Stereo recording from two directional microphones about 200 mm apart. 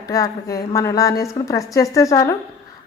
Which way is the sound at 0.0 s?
15° left (ahead or behind).